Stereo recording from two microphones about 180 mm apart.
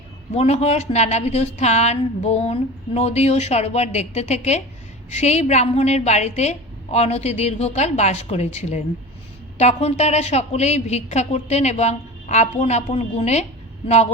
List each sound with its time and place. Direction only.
0.3 s a woman's voice: 35° left (ahead or behind)